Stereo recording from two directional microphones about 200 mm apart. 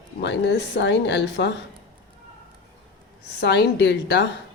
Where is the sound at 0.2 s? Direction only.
60° left (ahead or behind).